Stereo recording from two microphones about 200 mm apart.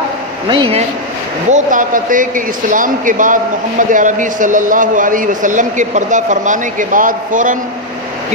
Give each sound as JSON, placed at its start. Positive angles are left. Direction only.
{"t": 0.5, "sound": "a man's voice", "side_deg": -25}
{"t": 1.5, "sound": "a man's voice", "side_deg": -40}